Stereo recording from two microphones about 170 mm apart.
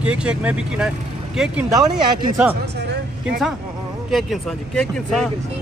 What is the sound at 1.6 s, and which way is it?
Speech, 20° right (ahead or behind).